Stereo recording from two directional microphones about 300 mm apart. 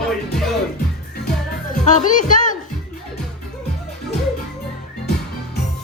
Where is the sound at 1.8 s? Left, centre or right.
Left.